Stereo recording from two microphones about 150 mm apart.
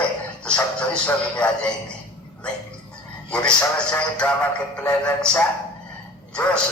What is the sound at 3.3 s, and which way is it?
Speech, 5° left (ahead or behind).